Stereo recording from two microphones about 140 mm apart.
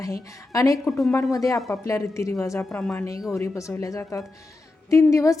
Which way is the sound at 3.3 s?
20° left (ahead or behind).